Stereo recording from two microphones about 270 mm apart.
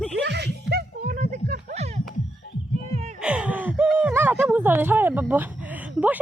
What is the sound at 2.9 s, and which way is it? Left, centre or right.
Wail, right.